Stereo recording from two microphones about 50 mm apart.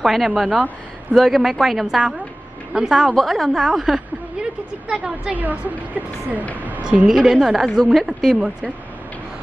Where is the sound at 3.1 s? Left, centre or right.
Centre.